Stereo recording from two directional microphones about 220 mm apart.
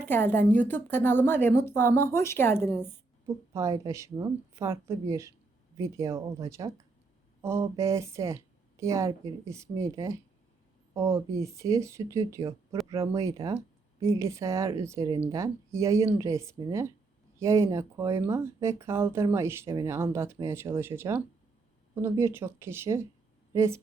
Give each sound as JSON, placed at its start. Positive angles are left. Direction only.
{"t": 0.0, "sound": "a woman's voice", "side_deg": 10}
{"t": 3.2, "sound": "speech", "side_deg": -15}